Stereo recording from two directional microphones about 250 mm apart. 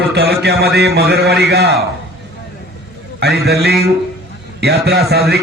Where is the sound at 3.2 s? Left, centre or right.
Right.